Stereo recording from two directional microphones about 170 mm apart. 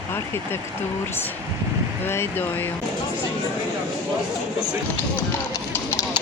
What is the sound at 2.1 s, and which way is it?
Speech, 15° left (ahead or behind).